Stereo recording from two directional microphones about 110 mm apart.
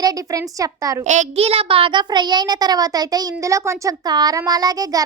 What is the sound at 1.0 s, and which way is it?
A child's voice, 90° right.